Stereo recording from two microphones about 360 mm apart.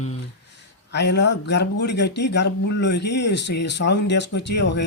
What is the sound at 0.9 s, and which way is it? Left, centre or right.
Speech, left.